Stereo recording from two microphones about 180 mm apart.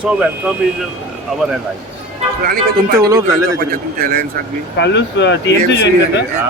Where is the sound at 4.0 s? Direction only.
50° right (ahead or behind).